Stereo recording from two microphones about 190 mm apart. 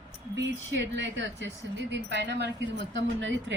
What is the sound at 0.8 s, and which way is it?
Speech, 70° right (ahead or behind).